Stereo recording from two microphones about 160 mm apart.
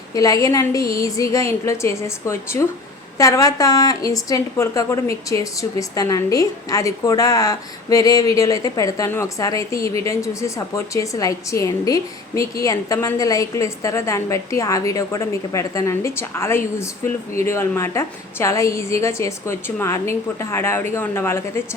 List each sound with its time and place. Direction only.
0.1 s a woman's voice: 20° left (ahead or behind)